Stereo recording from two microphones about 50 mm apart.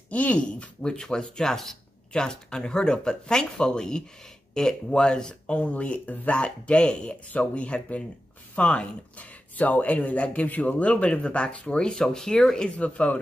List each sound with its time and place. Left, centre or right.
0.1 s speech: left